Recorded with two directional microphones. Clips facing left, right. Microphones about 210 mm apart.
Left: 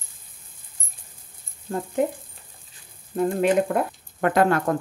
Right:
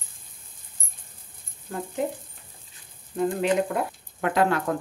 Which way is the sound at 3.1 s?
50° left (ahead or behind).